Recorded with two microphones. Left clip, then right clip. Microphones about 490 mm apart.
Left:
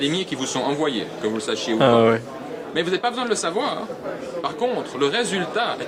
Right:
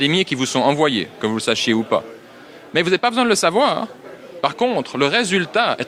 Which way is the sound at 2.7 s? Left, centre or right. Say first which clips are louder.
Right 6 dB; right.